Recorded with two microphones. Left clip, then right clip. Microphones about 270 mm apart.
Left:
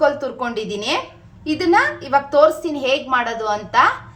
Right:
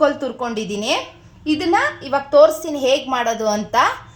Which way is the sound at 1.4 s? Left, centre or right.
Right.